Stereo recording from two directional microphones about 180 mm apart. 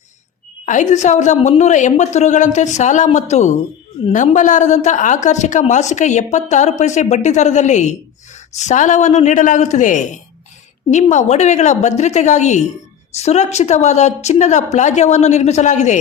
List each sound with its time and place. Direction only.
0.6 s a woman's voice: 45° left (ahead or behind)